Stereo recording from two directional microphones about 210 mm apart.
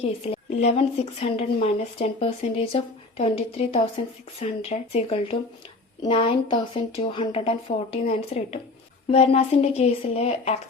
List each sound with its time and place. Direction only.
0.0 s speech: 30° left (ahead or behind)